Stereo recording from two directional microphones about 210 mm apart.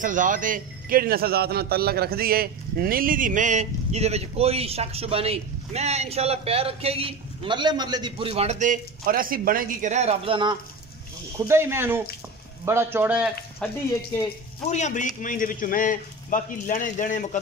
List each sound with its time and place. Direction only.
0.0 s a man's voice: 40° right (ahead or behind); by 10.6 s 25° right (ahead or behind)
11.3 s speech: 10° right (ahead or behind)
13.6 s speech: 5° left (ahead or behind)
14.7 s a man's voice: 35° left (ahead or behind)